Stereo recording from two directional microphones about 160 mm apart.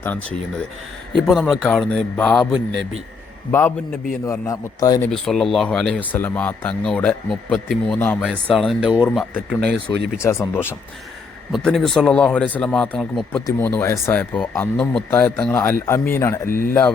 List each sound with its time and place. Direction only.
0.0 s speech: 10° left (ahead or behind)
4.3 s a man's voice: 20° left (ahead or behind)
5.0 s speech: centre (ahead or behind)
7.9 s speech: 10° left (ahead or behind)
11.5 s speech: centre (ahead or behind)
16.5 s speech: 60° left (ahead or behind)